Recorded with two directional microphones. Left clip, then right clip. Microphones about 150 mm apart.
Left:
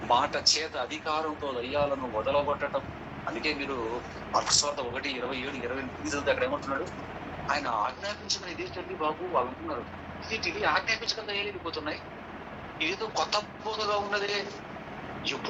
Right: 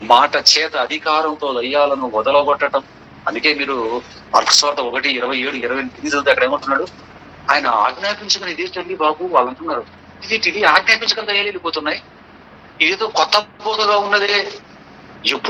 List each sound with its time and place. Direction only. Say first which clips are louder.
0.0 s a man's voice: right 14 dB; 45° right (ahead or behind)